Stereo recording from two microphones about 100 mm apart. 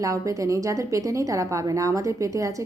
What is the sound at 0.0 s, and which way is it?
A woman's voice, 35° right (ahead or behind).